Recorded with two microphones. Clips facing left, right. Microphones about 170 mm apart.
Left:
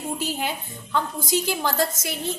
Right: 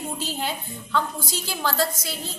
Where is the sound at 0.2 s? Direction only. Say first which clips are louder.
Left 1 dB; 15° left (ahead or behind).